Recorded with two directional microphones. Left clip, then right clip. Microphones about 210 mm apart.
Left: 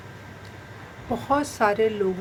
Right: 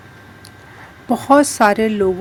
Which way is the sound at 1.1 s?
50° right (ahead or behind).